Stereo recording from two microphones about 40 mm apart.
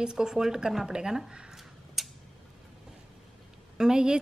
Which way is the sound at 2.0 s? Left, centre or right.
Centre.